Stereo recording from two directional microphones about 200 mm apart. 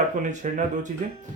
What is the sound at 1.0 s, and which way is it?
Speech, 40° right (ahead or behind).